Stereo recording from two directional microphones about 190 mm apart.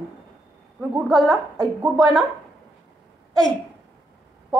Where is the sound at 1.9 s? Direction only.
20° right (ahead or behind).